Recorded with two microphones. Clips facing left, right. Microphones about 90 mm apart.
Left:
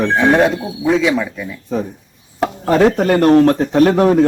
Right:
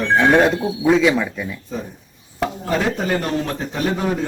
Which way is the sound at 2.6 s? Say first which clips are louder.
Left 10 dB; 65° left (ahead or behind).